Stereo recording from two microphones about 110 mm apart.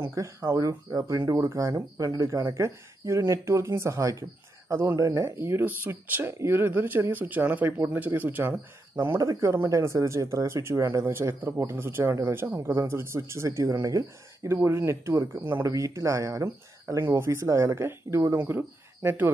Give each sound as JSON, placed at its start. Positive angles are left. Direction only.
{"t": 0.1, "sound": "speech", "side_deg": -30}